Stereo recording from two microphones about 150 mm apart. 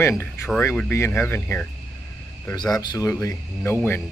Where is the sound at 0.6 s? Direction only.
15° left (ahead or behind).